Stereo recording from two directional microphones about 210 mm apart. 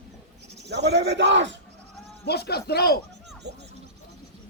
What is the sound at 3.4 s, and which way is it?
Speech, 55° right (ahead or behind).